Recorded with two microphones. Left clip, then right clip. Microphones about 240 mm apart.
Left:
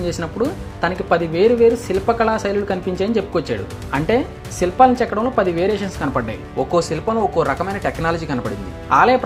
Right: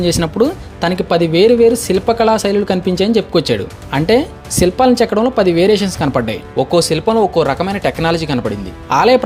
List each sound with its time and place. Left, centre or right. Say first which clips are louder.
0.0 s speech: right 7 dB; right